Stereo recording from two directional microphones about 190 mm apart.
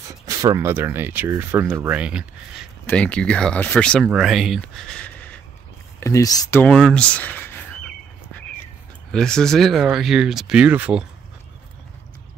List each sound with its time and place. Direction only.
0.4 s speech: 15° right (ahead or behind)
2.9 s speech: 5° left (ahead or behind)
6.6 s speech: 5° left (ahead or behind)
9.1 s speech: 5° left (ahead or behind)